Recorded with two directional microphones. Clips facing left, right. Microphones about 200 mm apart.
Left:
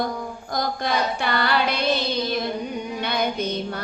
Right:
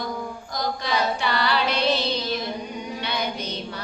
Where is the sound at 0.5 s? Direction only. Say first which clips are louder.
Left 2 dB; 50° left (ahead or behind).